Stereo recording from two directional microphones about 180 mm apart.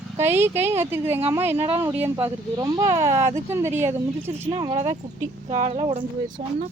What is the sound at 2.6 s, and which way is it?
Speech, 25° right (ahead or behind).